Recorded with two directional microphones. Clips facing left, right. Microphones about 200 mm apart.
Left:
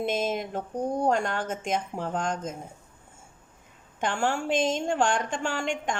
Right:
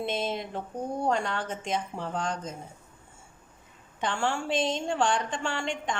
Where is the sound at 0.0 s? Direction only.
45° left (ahead or behind).